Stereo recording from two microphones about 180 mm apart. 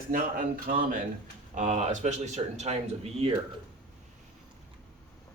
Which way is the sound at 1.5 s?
40° right (ahead or behind).